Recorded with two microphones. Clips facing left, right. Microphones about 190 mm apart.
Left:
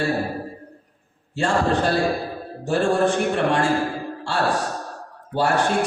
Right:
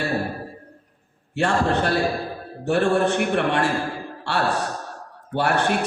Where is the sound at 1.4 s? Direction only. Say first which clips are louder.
Even; 65° right (ahead or behind).